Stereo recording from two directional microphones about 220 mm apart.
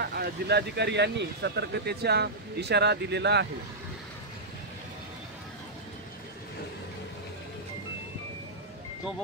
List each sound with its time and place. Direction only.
0.0 s speech: 45° right (ahead or behind)